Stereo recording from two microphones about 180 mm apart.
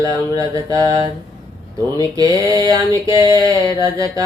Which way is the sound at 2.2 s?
20° right (ahead or behind).